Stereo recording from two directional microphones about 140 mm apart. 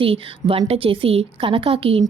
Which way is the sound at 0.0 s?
40° right (ahead or behind).